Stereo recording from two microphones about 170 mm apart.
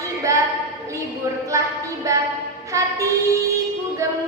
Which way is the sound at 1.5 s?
20° right (ahead or behind).